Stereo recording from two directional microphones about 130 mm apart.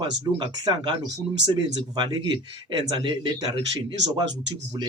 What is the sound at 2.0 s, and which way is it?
Speech, 35° right (ahead or behind).